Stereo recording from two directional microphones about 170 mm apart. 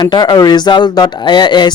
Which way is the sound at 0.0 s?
25° left (ahead or behind).